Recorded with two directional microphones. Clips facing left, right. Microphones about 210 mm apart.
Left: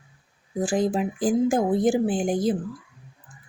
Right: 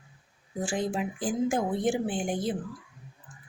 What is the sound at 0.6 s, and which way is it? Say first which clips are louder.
Speech: left 6 dB; 40° left (ahead or behind).